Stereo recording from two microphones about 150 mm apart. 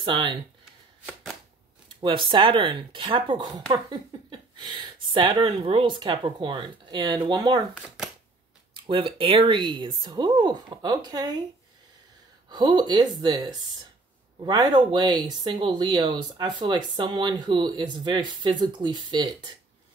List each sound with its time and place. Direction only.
0.0 s speech: 35° right (ahead or behind)
1.9 s speech: 35° right (ahead or behind)
8.7 s speech: 35° right (ahead or behind)
12.4 s speech: 30° right (ahead or behind)